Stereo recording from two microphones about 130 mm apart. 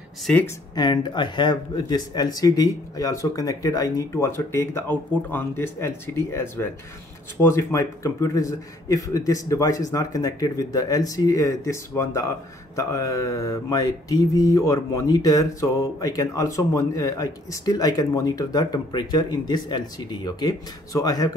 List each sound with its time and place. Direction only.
0.7 s mantra: 30° left (ahead or behind)